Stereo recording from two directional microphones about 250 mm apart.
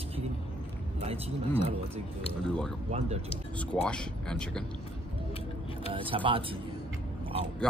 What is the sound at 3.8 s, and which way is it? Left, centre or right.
Speech, centre.